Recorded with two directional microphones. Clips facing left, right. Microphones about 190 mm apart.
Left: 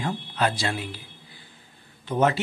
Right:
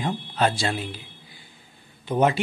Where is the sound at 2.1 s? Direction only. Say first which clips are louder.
Right 1 dB; 15° right (ahead or behind).